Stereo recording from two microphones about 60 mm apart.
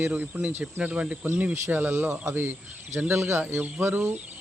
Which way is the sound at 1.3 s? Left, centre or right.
Right.